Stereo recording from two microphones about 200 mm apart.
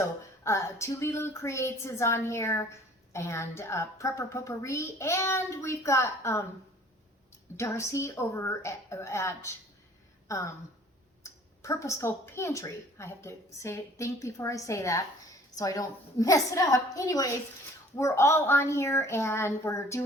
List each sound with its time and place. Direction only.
0.4 s a woman's voice: 15° left (ahead or behind)
7.5 s a woman's voice: 15° left (ahead or behind)